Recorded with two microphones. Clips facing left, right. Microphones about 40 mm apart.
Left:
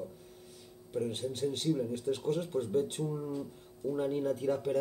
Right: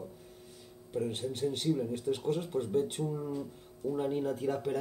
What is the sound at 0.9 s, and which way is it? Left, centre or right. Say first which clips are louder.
Speech: even; centre.